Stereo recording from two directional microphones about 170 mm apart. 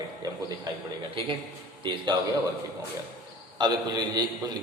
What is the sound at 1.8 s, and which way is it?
Speech, 25° right (ahead or behind).